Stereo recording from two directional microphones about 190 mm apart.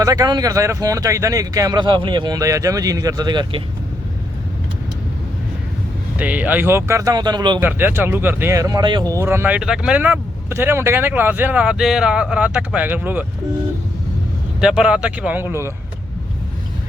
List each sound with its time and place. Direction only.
0.0 s speech: 20° right (ahead or behind)
6.1 s speech: 10° right (ahead or behind)
7.6 s speech: 10° right (ahead or behind)
14.6 s speech: 5° right (ahead or behind)